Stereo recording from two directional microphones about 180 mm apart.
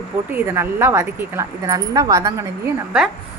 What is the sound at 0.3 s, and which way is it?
Speech, 15° right (ahead or behind).